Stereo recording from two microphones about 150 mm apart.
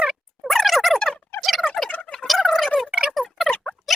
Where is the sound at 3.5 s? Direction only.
10° left (ahead or behind).